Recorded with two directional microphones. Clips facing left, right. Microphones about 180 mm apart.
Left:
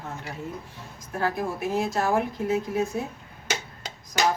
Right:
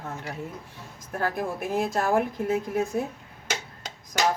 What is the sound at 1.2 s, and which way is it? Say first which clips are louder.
Speech: left 1 dB; 55° right (ahead or behind).